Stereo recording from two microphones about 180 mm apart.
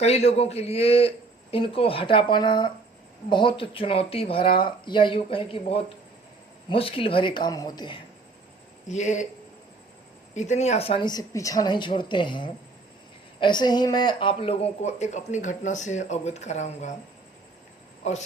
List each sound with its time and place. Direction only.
0.0 s speech: 35° left (ahead or behind)
8.9 s speech: 40° left (ahead or behind)
10.3 s speech: 40° left (ahead or behind)
18.0 s speech: 40° left (ahead or behind)